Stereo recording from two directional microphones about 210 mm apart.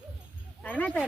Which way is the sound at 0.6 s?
5° left (ahead or behind).